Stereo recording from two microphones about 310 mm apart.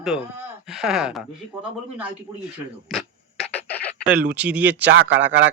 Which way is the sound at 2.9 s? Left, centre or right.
Centre.